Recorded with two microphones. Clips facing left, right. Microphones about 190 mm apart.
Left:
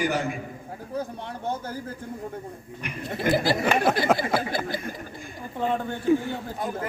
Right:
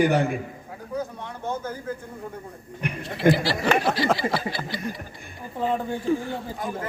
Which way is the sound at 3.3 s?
45° left (ahead or behind).